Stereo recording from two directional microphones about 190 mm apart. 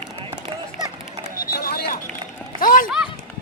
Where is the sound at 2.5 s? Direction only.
45° left (ahead or behind).